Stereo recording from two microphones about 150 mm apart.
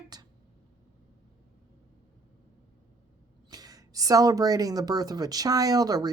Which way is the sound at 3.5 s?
25° right (ahead or behind).